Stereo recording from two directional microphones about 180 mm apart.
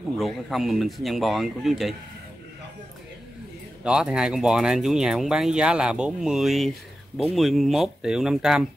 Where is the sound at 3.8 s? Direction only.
5° right (ahead or behind).